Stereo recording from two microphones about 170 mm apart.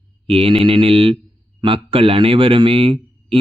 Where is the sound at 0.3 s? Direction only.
35° right (ahead or behind).